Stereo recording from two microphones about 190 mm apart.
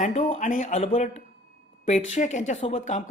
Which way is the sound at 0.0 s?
35° left (ahead or behind).